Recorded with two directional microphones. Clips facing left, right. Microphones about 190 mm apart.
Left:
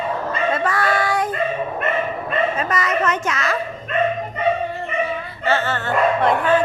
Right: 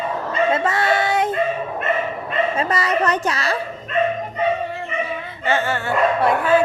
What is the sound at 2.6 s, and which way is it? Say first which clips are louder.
Speech: right 1 dB; 30° right (ahead or behind).